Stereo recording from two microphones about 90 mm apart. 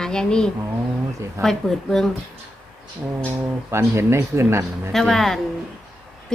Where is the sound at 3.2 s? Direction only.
30° right (ahead or behind).